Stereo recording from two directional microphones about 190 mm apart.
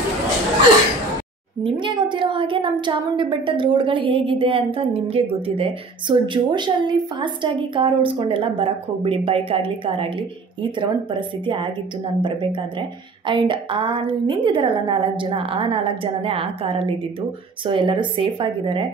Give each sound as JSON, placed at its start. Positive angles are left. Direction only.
{"t": 1.6, "sound": "a woman's voice", "side_deg": -25}